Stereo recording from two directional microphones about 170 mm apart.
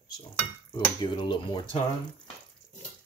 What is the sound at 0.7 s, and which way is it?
Speech, 25° left (ahead or behind).